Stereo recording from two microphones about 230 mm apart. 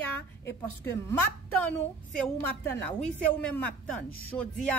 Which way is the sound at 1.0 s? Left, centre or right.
Centre.